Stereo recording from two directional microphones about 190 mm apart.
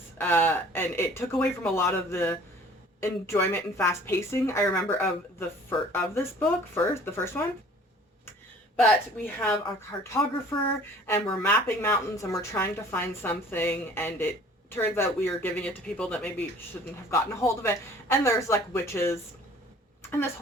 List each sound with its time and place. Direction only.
0.2 s a woman's voice: 10° left (ahead or behind)
8.7 s a woman's voice: 5° left (ahead or behind)
11.0 s a woman's voice: 10° left (ahead or behind)
20.0 s a sound: 10° left (ahead or behind)